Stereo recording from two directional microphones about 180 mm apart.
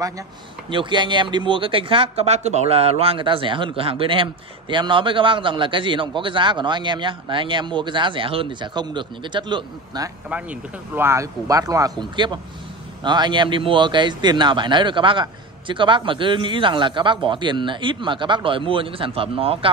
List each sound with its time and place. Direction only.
0.7 s speech: 25° right (ahead or behind)
10.3 s speech: 10° right (ahead or behind); by 19.7 s 30° right (ahead or behind)